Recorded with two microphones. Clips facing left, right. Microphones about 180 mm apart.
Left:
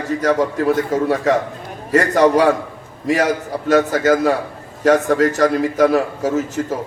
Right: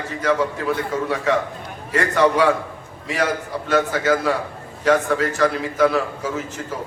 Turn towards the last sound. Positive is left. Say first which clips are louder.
# left 8 dB
turn(degrees=40)  # may be behind; listen again after turning